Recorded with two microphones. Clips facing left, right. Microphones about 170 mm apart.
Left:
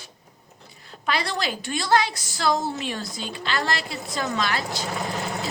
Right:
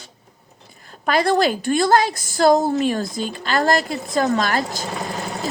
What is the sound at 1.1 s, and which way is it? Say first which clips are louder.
A woman's voice: right 9 dB; 50° right (ahead or behind).